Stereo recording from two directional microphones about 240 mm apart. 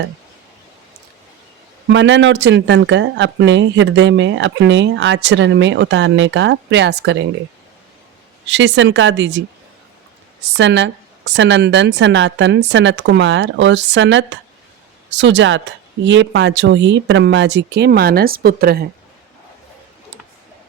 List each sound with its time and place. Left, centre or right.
1.9 s speech: right
8.4 s speech: right
10.6 s speech: right